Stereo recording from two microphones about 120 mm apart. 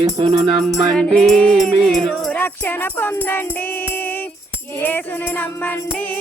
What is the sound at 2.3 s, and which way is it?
Music, 15° left (ahead or behind).